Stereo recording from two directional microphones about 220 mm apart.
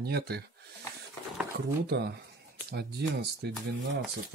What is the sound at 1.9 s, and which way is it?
Speech, 50° right (ahead or behind).